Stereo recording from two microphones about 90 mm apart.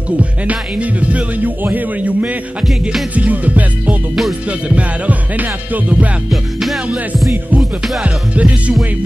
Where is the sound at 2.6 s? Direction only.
5° right (ahead or behind).